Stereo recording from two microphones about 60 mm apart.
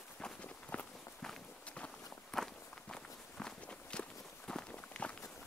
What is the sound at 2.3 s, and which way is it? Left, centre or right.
Walk, centre.